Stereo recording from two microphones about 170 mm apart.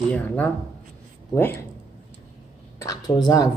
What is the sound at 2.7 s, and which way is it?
Speech, 20° left (ahead or behind).